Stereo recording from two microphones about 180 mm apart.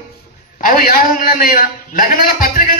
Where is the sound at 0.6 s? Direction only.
50° left (ahead or behind).